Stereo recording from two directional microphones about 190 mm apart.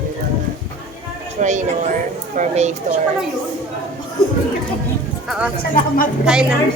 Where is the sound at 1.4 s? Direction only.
40° right (ahead or behind).